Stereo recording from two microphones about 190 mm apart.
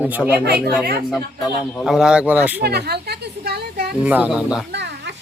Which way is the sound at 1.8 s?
Centre (ahead or behind).